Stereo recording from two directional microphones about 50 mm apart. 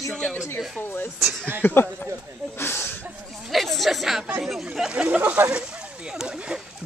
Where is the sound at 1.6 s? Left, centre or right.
Left.